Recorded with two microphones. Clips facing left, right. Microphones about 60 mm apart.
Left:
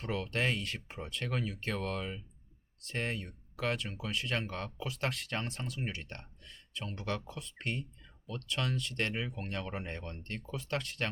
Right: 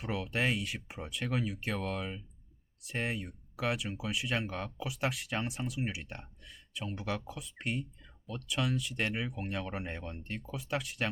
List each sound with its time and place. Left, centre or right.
0.0 s speech: centre